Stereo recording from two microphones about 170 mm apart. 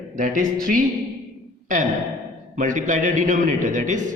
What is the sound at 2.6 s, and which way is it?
A man's voice, 50° right (ahead or behind).